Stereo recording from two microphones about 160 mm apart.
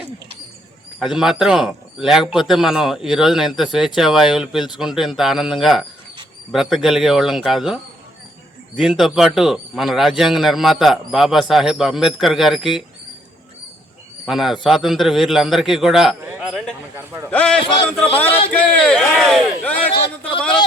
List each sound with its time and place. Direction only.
0.9 s a man's voice: centre (ahead or behind)
8.8 s a man's voice: centre (ahead or behind)
14.3 s a man's voice: centre (ahead or behind)
17.0 s a man's voice: 15° right (ahead or behind)
17.2 s a man's voice: 5° left (ahead or behind)
19.9 s a sound: 30° left (ahead or behind)